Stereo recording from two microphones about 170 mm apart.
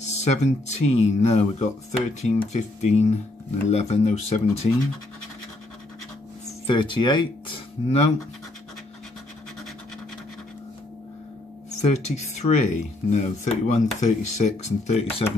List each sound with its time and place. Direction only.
0.1 s speech: 40° left (ahead or behind)
6.7 s speech: 30° left (ahead or behind)
11.8 s speech: 40° left (ahead or behind)